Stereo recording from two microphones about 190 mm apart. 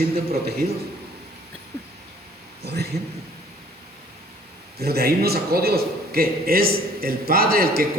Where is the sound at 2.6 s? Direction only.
60° right (ahead or behind).